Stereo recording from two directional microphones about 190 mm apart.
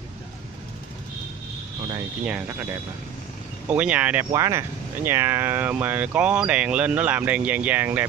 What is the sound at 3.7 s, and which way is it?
Speech, 5° right (ahead or behind).